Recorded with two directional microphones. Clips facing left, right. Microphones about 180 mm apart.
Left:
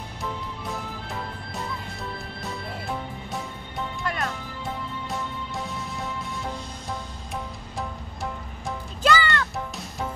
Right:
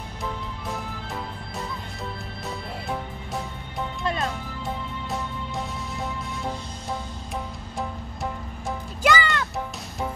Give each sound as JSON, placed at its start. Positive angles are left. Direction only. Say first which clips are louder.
{"t": 4.0, "sound": "music", "louder": "right 3 dB", "side_deg": -25}
{"t": 9.0, "sound": "music", "louder": "even", "side_deg": -15}